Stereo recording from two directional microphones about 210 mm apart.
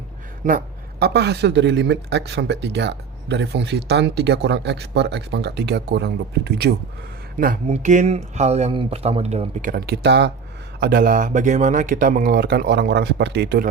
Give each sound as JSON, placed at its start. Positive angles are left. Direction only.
{"t": 0.4, "sound": "speech", "side_deg": -45}
{"t": 7.3, "sound": "speech", "side_deg": -40}